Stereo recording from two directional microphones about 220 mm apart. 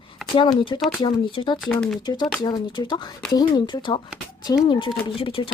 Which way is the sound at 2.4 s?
20° left (ahead or behind).